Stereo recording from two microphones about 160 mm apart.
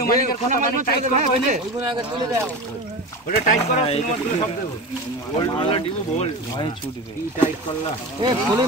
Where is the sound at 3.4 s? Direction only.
40° left (ahead or behind).